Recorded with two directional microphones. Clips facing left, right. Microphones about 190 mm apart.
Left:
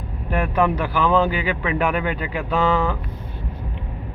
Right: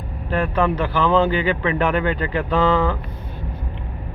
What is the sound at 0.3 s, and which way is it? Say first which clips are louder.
Speech: even; 10° left (ahead or behind).